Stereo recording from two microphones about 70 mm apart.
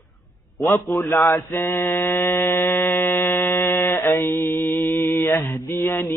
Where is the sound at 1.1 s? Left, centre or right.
Left.